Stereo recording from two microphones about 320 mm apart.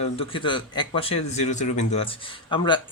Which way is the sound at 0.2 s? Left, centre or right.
Centre.